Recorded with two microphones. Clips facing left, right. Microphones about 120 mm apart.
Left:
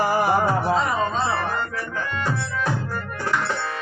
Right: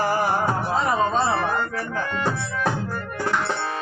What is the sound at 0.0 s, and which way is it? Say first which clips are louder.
Music: left 1 dB; 10° left (ahead or behind).